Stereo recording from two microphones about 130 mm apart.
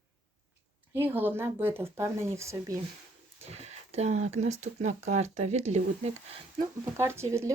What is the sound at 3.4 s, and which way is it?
Speech, 55° right (ahead or behind).